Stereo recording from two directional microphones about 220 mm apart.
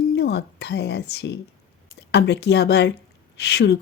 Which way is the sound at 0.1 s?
50° left (ahead or behind).